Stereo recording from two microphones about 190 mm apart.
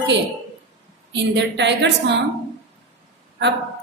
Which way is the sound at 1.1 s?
65° right (ahead or behind).